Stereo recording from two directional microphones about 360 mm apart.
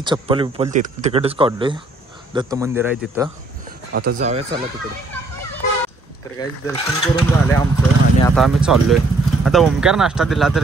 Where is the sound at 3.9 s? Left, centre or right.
Right.